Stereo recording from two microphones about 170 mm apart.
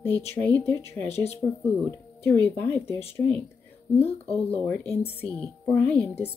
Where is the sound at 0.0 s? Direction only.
15° left (ahead or behind).